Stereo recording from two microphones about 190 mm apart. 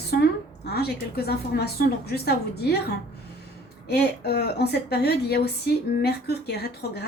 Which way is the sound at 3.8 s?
55° left (ahead or behind).